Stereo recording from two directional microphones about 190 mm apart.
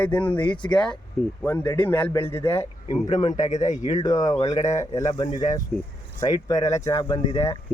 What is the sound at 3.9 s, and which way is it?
Speech, 20° left (ahead or behind).